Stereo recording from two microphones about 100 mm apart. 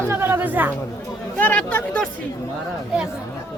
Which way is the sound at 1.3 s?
15° left (ahead or behind).